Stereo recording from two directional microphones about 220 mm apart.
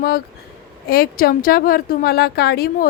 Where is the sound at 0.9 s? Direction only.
40° left (ahead or behind).